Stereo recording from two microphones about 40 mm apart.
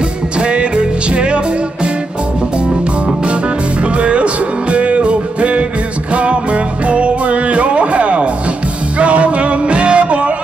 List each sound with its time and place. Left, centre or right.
0.4 s music: right
3.9 s music: right